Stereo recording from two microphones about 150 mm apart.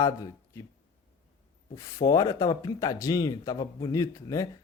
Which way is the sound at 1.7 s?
20° left (ahead or behind).